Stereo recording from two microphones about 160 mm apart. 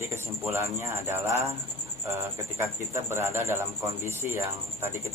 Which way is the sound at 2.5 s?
15° right (ahead or behind).